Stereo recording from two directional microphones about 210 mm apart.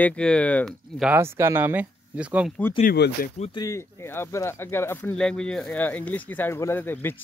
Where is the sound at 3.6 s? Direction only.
10° left (ahead or behind).